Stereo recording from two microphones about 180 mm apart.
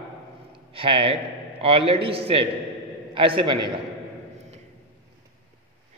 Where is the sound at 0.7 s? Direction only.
30° right (ahead or behind).